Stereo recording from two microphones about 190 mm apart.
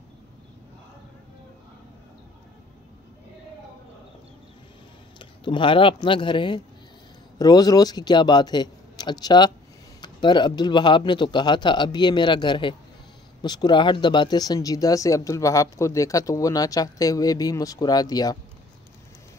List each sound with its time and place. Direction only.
5.2 s speech: 25° left (ahead or behind)